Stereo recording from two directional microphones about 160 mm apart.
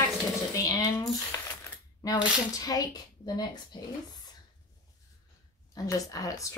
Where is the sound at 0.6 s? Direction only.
20° left (ahead or behind).